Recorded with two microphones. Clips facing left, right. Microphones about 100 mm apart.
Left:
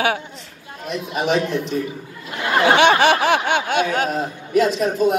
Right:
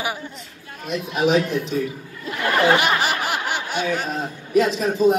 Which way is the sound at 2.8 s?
85° left.